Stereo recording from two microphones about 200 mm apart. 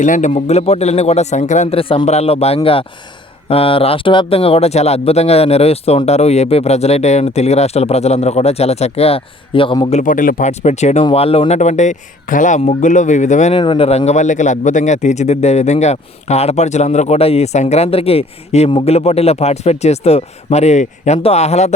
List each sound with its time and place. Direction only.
0.0 s speech: 40° left (ahead or behind)
10.0 s speech: 40° left (ahead or behind)